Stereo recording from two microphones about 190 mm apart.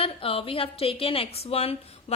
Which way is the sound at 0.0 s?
30° left (ahead or behind).